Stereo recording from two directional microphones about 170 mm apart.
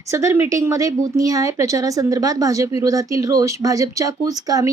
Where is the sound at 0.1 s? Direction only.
15° right (ahead or behind).